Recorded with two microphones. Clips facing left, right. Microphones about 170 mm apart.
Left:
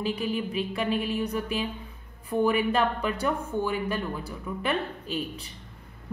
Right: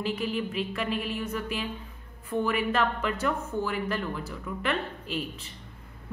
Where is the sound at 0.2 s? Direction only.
15° left (ahead or behind).